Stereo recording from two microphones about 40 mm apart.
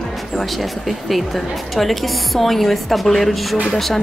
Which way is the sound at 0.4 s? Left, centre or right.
Centre.